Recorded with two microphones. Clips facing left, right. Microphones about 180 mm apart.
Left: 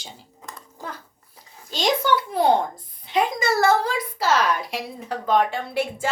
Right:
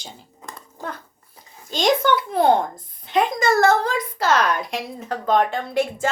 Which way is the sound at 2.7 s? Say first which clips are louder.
Right 2 dB; 50° right (ahead or behind).